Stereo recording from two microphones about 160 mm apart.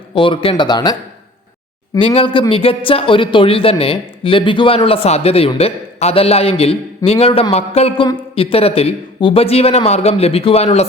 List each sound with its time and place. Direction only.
0.1 s speech: 35° left (ahead or behind)
2.0 s speech: 30° left (ahead or behind)